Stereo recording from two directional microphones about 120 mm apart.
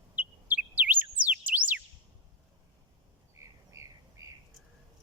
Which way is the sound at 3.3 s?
25° right (ahead or behind).